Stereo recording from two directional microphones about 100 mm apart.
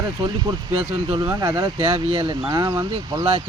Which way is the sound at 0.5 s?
40° right (ahead or behind).